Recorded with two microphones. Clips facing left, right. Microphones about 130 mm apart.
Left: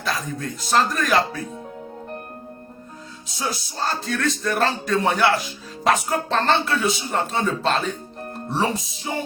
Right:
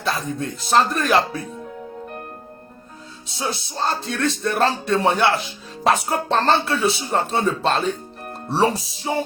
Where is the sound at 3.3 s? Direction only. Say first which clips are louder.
Right 1 dB; 25° right (ahead or behind).